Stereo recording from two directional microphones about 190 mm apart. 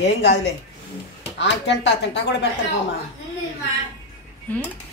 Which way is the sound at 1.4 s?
70° left (ahead or behind).